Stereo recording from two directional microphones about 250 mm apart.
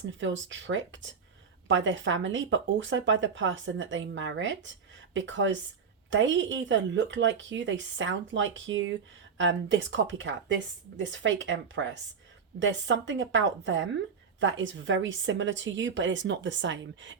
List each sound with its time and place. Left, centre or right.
0.1 s speech: right